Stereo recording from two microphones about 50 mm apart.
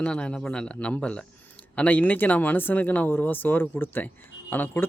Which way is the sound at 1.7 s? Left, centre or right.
Left.